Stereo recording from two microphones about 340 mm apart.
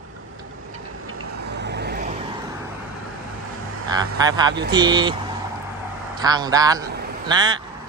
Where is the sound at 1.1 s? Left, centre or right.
Right.